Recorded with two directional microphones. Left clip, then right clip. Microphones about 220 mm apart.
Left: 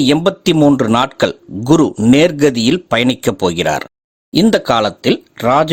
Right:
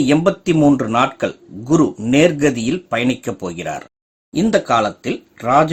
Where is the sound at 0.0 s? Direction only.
45° left (ahead or behind).